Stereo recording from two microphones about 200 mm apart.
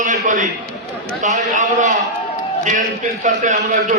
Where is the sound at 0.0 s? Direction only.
40° right (ahead or behind).